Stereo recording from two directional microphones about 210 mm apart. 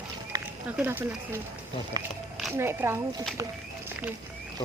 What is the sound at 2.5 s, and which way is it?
Speech, 10° right (ahead or behind).